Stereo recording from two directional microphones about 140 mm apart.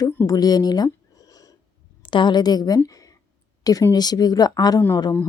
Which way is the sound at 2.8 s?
25° left (ahead or behind).